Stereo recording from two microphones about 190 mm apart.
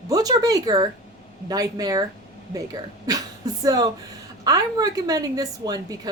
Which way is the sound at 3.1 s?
20° right (ahead or behind).